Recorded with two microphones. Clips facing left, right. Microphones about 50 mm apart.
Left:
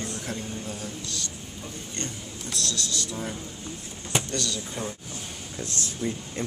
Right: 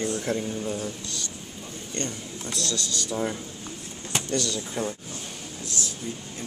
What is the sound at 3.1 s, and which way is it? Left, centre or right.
Speech, right.